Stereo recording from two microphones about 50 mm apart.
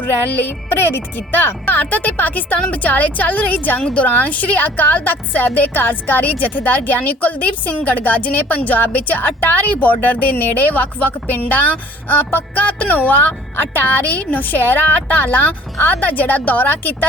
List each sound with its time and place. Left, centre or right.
0.0 s a woman's voice: left
3.8 s a woman's voice: left
4.1 s a woman's voice: left